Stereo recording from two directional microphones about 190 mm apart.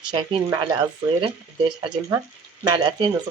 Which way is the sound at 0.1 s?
25° right (ahead or behind).